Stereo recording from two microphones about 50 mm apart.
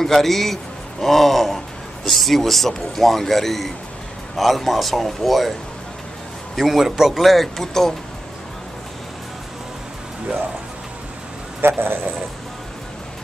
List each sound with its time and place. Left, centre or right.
0.0 s speech: centre
6.5 s speech: centre
11.6 s speech: right